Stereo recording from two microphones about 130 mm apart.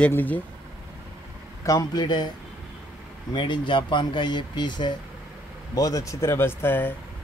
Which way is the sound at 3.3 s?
35° left (ahead or behind).